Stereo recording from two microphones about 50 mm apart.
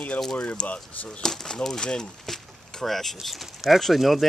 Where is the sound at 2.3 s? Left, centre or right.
Centre.